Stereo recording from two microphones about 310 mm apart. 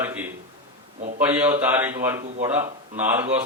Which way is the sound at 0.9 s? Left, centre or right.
Right.